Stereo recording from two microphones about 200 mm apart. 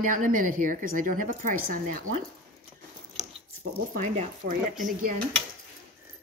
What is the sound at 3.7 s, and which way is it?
Speech, 35° right (ahead or behind).